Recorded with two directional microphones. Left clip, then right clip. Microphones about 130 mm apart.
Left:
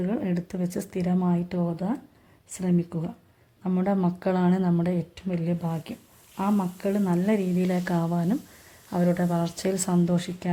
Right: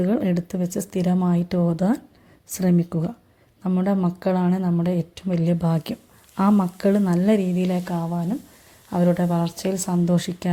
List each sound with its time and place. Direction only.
0.0 s speech: 25° right (ahead or behind)
0.3 s speech: 10° right (ahead or behind)
3.7 s speech: 5° right (ahead or behind)
7.6 s speech: 5° right (ahead or behind)
8.9 s speech: 15° right (ahead or behind)
10.1 s speech: 15° right (ahead or behind)